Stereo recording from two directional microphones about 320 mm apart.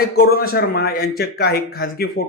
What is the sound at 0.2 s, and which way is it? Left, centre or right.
A man's voice, left.